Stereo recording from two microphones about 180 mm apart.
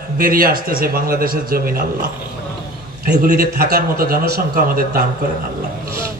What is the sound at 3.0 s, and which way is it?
A man's voice, 60° right (ahead or behind).